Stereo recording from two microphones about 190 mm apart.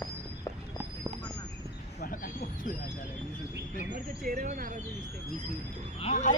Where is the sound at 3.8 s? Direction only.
45° right (ahead or behind).